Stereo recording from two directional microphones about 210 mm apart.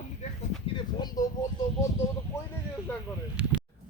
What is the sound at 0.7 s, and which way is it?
Speech, 20° left (ahead or behind).